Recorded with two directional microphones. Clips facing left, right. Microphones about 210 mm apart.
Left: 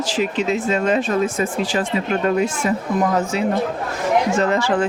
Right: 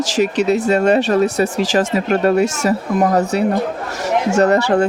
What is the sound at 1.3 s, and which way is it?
Speech, 80° right.